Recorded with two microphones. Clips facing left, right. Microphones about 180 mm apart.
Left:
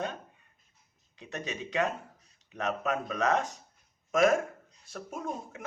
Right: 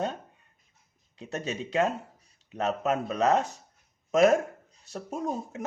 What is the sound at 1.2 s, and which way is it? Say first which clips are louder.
Speech: right 4 dB; 40° right (ahead or behind).